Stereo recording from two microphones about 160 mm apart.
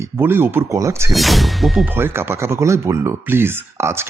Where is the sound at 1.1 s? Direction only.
Centre (ahead or behind).